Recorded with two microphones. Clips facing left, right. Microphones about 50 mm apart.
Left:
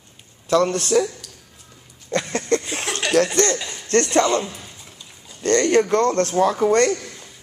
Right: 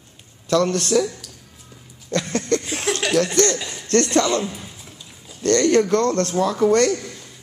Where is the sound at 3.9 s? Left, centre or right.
Left.